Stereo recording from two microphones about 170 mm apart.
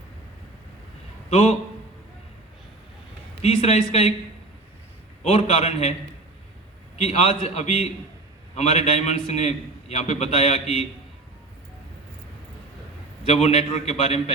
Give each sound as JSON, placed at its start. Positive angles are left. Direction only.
{"t": 1.3, "sound": "a man's voice", "side_deg": 40}
{"t": 3.4, "sound": "a man's voice", "side_deg": 40}
{"t": 5.2, "sound": "a man's voice", "side_deg": 40}
{"t": 6.9, "sound": "a man's voice", "side_deg": 40}
{"t": 13.2, "sound": "a man's voice", "side_deg": 40}